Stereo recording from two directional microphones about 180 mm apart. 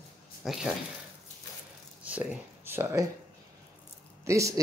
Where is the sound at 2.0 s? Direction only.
5° right (ahead or behind).